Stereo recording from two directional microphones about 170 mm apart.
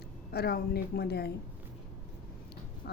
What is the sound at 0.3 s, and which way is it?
A woman's voice, 65° left (ahead or behind).